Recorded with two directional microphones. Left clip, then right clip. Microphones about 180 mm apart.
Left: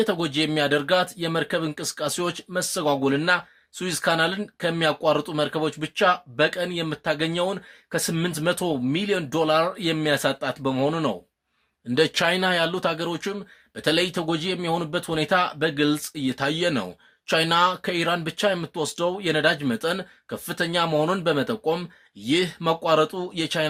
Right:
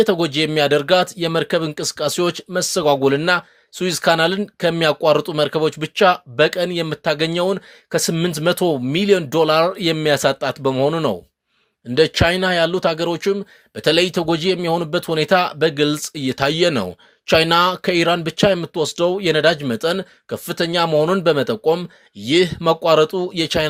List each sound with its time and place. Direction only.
0.0 s speech: 40° right (ahead or behind)